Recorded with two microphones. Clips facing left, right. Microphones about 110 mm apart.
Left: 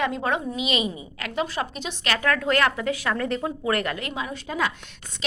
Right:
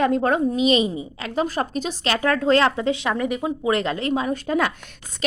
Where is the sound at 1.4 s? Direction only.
40° right (ahead or behind).